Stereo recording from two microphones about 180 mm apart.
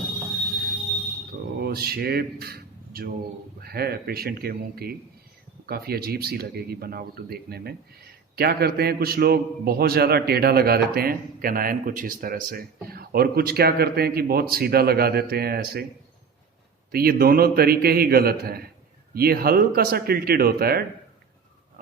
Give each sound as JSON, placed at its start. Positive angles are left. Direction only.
{"t": 1.3, "sound": "a sound", "side_deg": -60}
{"t": 3.6, "sound": "a man's voice", "side_deg": -60}
{"t": 16.9, "sound": "a man's voice", "side_deg": -55}